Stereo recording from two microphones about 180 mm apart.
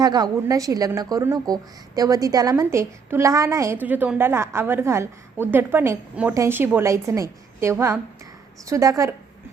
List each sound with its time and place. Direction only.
0.0 s a woman's voice: 20° right (ahead or behind)